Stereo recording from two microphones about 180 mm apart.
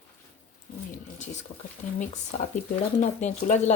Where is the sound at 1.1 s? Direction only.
40° left (ahead or behind).